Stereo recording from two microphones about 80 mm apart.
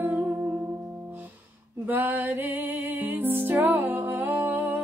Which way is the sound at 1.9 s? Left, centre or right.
Right.